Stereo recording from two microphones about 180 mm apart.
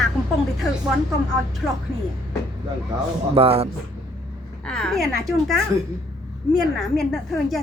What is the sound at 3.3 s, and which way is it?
Speech, 35° right (ahead or behind).